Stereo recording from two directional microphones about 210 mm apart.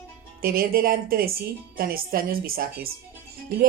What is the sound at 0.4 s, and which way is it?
Speech, 45° right (ahead or behind).